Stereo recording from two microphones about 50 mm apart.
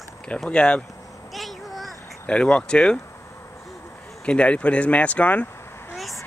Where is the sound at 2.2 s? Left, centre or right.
Left.